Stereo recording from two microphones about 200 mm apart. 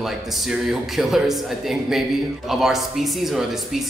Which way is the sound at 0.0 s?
Centre (ahead or behind).